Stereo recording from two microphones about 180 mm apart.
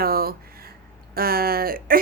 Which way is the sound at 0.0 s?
55° right (ahead or behind).